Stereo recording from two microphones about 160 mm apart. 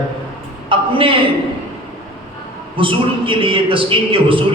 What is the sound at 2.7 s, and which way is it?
A man's voice, 35° right (ahead or behind).